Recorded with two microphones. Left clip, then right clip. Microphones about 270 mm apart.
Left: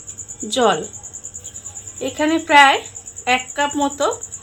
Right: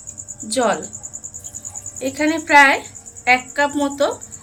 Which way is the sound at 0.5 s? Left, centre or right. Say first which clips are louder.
Left 2 dB; left.